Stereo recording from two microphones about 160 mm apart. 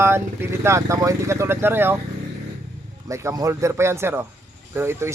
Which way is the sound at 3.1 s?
20° right (ahead or behind).